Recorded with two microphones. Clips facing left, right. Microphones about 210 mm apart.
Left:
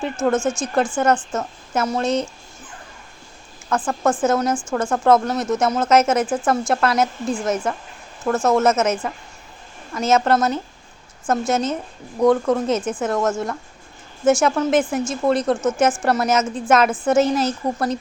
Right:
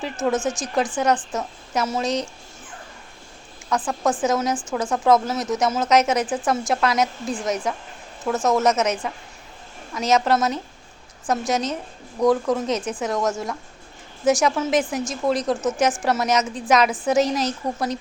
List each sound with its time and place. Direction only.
0.3 s speech: 20° right (ahead or behind)
0.6 s speech: centre (ahead or behind)
3.7 s speech: centre (ahead or behind)